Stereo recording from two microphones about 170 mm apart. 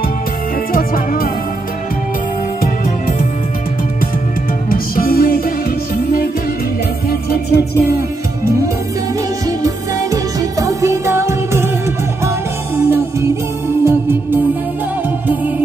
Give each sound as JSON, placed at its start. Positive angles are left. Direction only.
{"t": 0.7, "sound": "music", "side_deg": 55}
{"t": 2.6, "sound": "music", "side_deg": 55}
{"t": 4.6, "sound": "music", "side_deg": 60}
{"t": 7.1, "sound": "music", "side_deg": 65}
{"t": 10.1, "sound": "music", "side_deg": -20}
{"t": 12.7, "sound": "music", "side_deg": -15}